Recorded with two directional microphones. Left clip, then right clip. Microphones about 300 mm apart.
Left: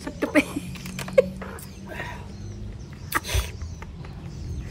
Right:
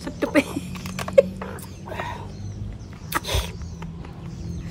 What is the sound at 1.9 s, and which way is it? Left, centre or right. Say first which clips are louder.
Bird: right 4 dB; centre.